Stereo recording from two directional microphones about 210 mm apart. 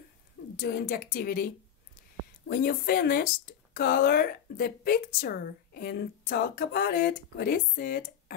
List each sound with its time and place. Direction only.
0.6 s speech: 45° left (ahead or behind)